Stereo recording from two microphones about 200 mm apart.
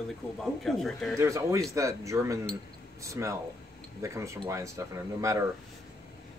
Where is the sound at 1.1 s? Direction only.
15° right (ahead or behind).